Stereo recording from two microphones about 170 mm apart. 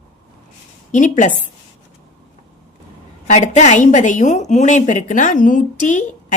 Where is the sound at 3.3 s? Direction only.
45° left (ahead or behind).